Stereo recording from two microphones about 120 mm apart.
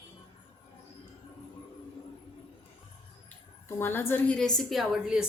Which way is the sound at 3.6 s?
20° left (ahead or behind).